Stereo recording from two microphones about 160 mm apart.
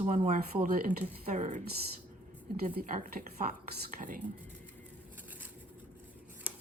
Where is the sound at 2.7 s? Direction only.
60° right (ahead or behind).